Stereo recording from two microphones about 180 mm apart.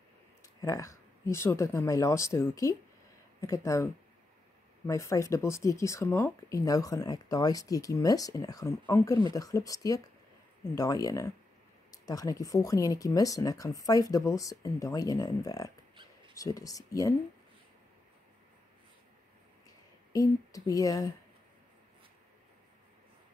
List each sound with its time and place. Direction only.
0.6 s speech: 20° left (ahead or behind)
20.1 s speech: 20° left (ahead or behind)